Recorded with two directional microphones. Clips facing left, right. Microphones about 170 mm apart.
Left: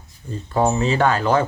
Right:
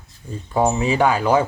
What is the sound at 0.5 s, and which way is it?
Speech, 10° right (ahead or behind).